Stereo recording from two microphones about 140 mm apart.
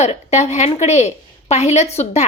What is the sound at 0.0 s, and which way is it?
A woman's voice, 50° left (ahead or behind).